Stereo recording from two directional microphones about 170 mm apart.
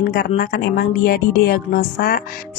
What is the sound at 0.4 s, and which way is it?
A woman's voice, 60° left (ahead or behind).